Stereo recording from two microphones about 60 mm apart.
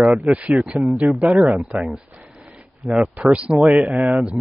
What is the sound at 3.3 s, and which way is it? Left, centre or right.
Speech, centre.